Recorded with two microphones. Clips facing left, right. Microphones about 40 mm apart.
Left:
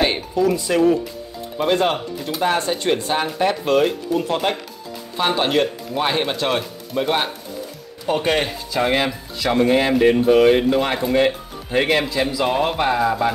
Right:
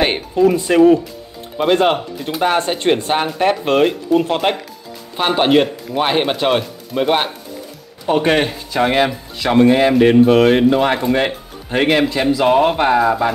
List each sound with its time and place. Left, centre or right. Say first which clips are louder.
0.0 s speech: right 4 dB; right
9.4 s speech: right 5 dB; right
9.7 s speech: right 2 dB; centre